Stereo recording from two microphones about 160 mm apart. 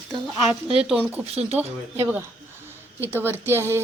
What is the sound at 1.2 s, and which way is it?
Speech, 40° right (ahead or behind).